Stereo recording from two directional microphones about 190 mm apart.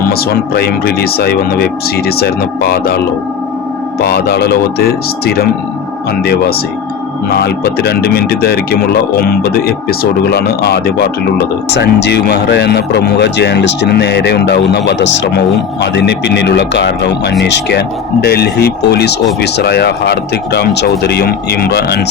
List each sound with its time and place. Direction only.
0.1 s speech: 55° left (ahead or behind)
4.0 s speech: 60° left (ahead or behind)
7.3 s speech: 55° left (ahead or behind)